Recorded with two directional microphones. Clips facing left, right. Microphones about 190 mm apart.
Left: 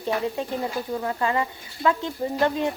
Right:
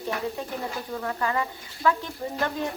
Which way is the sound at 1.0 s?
20° left (ahead or behind).